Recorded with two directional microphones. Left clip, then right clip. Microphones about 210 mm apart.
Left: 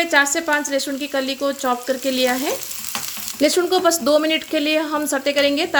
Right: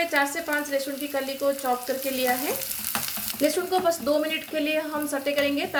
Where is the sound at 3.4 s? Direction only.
50° left (ahead or behind).